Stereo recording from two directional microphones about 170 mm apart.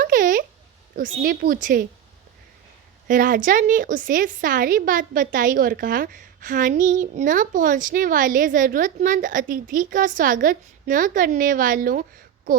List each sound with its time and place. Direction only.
0.0 s a sound: 50° right (ahead or behind)
0.9 s a woman's voice: 55° right (ahead or behind)
3.1 s a woman's voice: 50° right (ahead or behind)